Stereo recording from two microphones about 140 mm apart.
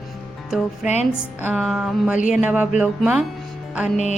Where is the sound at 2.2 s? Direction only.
65° left (ahead or behind).